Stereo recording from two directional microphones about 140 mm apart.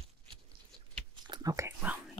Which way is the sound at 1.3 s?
25° right (ahead or behind).